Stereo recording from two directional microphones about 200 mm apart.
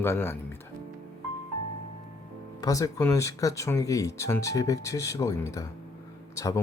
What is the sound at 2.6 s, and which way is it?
Speech, 15° left (ahead or behind).